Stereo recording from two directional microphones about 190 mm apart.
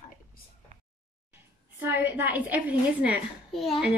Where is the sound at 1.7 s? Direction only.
10° right (ahead or behind).